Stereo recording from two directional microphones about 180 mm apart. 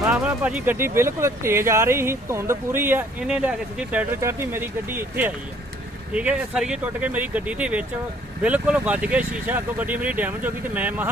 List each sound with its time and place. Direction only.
0.1 s speech: 5° right (ahead or behind)